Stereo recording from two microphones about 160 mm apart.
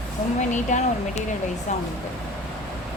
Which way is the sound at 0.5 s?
45° left (ahead or behind).